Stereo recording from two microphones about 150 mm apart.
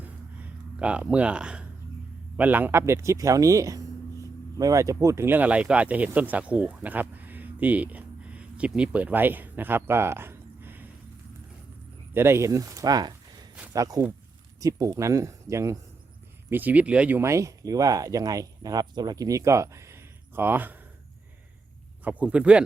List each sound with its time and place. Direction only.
0.0 s a sound: 10° right (ahead or behind)
2.3 s speech: 10° right (ahead or behind)
12.1 s speech: 15° right (ahead or behind)
22.0 s speech: 10° right (ahead or behind)